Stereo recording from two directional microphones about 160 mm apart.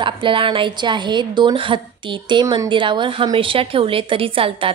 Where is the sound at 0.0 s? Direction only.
30° right (ahead or behind).